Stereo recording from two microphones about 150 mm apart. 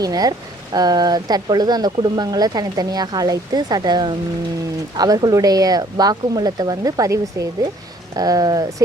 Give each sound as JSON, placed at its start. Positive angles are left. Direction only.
{"t": 0.0, "sound": "speech", "side_deg": -25}